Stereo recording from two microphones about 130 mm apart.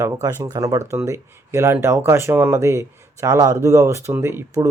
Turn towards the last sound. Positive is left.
turn(degrees=-20)  # may be behind; listen again after turning